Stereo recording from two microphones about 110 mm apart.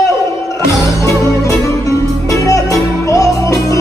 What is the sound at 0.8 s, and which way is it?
Music, 30° left (ahead or behind).